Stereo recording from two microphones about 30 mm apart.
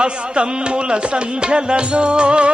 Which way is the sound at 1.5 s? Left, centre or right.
Right.